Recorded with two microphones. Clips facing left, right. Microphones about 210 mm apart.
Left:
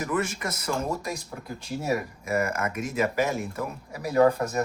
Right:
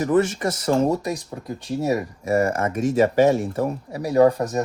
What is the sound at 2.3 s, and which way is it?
Speech, 35° right (ahead or behind).